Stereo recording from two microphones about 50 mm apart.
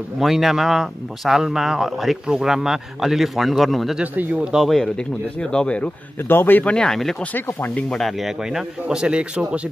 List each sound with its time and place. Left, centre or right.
0.2 s speech: centre
2.2 s speech: centre
4.0 s speech: right
4.4 s speech: centre
4.6 s speech: centre
5.4 s speech: centre
6.2 s speech: left
6.8 s speech: centre
7.3 s speech: left
7.9 s speech: centre
8.8 s a man's voice: centre